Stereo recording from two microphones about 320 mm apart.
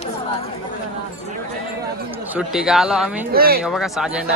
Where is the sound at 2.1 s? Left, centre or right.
Centre.